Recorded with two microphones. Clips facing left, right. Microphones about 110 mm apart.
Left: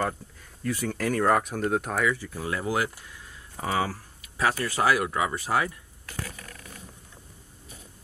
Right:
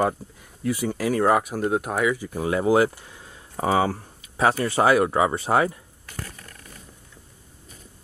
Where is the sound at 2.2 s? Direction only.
20° right (ahead or behind).